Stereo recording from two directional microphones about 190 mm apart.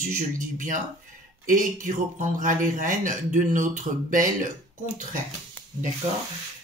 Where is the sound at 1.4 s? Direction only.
45° right (ahead or behind).